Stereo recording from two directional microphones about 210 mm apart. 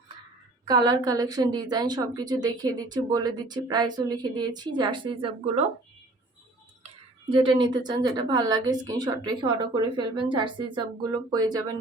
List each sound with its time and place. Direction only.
0.7 s a woman's voice: 20° right (ahead or behind)
7.3 s a woman's voice: 25° right (ahead or behind)